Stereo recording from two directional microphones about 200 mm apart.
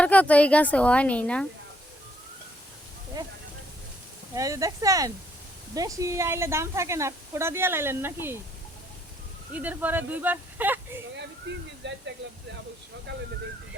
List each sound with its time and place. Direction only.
0.0 s speech: 5° left (ahead or behind)
4.4 s a woman's voice: 15° right (ahead or behind)
9.5 s a woman's voice: 10° right (ahead or behind)
11.5 s speech: 65° right (ahead or behind)